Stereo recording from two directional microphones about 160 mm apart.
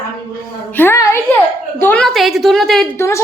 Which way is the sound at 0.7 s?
15° left (ahead or behind).